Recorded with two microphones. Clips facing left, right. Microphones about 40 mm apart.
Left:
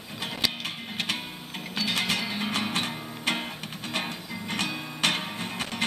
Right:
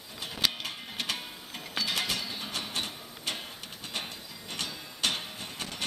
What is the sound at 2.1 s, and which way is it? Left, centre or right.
Music, left.